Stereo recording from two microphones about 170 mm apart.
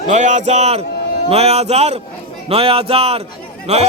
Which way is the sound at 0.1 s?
45° right (ahead or behind).